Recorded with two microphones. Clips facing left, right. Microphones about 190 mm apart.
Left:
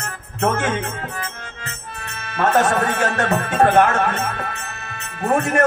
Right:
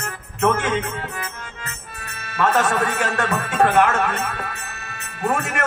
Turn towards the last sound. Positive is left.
turn(degrees=40)  # may be behind; listen again after turning